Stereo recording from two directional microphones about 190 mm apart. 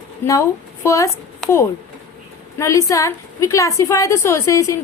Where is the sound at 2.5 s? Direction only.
15° left (ahead or behind).